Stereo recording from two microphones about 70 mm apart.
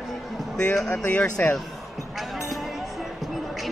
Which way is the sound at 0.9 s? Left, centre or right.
Left.